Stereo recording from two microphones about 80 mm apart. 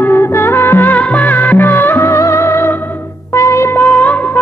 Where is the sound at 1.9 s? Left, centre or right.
Left.